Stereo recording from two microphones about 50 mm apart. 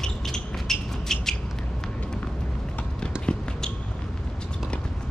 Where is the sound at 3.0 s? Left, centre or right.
Centre.